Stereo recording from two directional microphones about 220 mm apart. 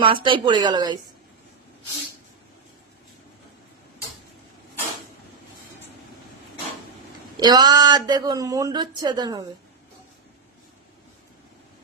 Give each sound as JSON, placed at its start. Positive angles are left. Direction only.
{"t": 0.0, "sound": "speech", "side_deg": -20}
{"t": 7.3, "sound": "speech", "side_deg": -20}